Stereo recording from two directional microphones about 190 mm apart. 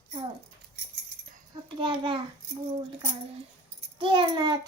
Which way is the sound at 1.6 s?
25° right (ahead or behind).